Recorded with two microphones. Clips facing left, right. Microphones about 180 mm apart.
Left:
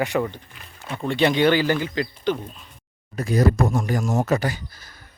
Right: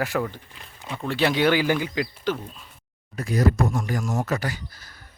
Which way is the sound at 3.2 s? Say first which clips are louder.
Left 2 dB; 25° left (ahead or behind).